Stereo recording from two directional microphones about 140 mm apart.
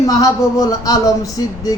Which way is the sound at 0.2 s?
25° left (ahead or behind).